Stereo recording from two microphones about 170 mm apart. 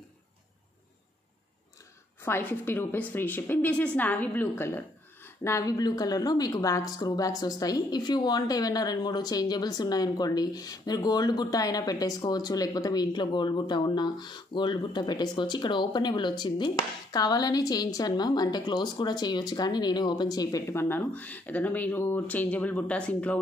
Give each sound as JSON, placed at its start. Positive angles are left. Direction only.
{"t": 2.2, "sound": "a woman's voice", "side_deg": 15}